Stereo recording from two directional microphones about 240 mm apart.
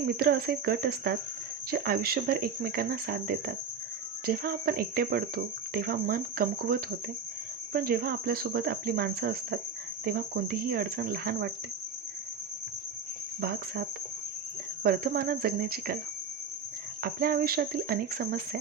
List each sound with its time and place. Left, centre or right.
0.1 s speech: right
13.4 s speech: right
14.8 s speech: right
17.0 s speech: right